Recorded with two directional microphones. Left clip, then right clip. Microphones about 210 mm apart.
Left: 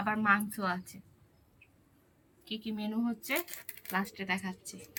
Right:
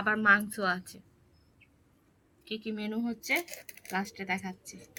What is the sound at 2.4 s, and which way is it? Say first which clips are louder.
Speech: right 3 dB; 45° right (ahead or behind).